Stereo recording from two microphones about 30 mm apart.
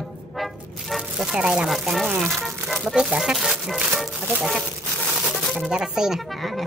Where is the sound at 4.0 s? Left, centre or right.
Centre.